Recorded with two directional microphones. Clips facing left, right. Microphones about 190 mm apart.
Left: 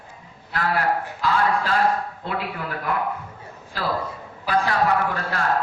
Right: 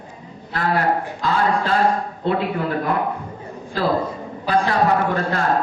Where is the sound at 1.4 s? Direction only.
25° right (ahead or behind).